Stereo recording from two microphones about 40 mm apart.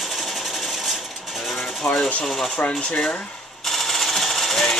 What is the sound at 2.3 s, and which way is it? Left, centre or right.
Speech, centre.